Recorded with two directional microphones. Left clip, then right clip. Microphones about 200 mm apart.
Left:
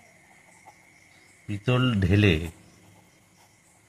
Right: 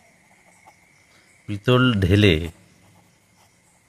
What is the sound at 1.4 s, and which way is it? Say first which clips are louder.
Speech: right 7 dB; 50° right (ahead or behind).